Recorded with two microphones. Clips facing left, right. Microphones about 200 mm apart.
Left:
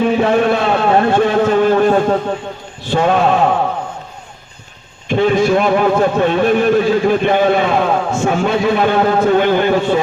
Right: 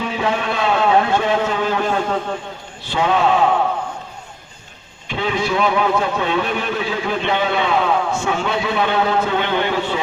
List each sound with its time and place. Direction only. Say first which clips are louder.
0.0 s a sound: left 9 dB; 50° left (ahead or behind)
2.9 s a man's voice: left 4 dB; 50° left (ahead or behind)
5.0 s a man's voice: left 9 dB; 50° left (ahead or behind)